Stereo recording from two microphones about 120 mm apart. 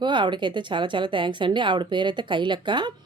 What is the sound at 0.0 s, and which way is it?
Speech, 40° right (ahead or behind).